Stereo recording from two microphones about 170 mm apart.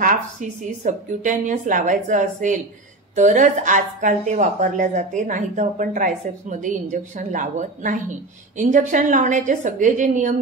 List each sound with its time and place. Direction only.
0.0 s speech: 45° right (ahead or behind)